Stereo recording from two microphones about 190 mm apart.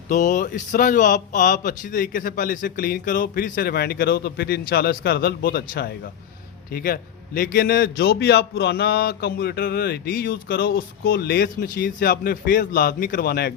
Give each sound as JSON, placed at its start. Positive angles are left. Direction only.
{"t": 0.1, "sound": "a man's voice", "side_deg": 40}